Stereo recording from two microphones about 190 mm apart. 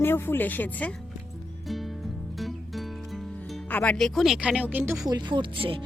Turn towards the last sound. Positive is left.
turn(degrees=-30)  # may be behind; listen again after turning